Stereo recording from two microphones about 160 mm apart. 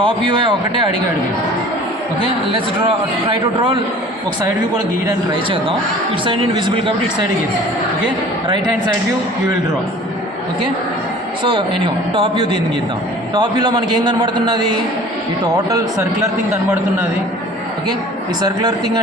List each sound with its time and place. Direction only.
0.0 s a man's voice: 30° right (ahead or behind)
3.2 s a man's voice: 35° right (ahead or behind)
5.0 s a man's voice: 30° right (ahead or behind)
11.4 s a man's voice: 30° right (ahead or behind)
15.7 s a man's voice: 20° right (ahead or behind)